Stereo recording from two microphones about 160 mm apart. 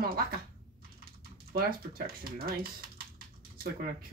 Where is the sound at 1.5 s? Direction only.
70° right (ahead or behind).